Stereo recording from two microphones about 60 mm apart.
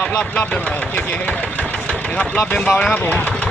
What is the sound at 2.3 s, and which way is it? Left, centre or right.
Speech, left.